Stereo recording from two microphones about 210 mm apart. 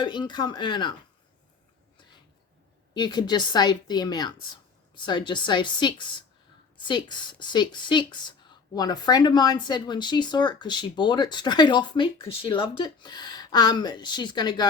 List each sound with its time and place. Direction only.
0.0 s a woman's voice: 20° left (ahead or behind)
2.9 s a woman's voice: 20° left (ahead or behind)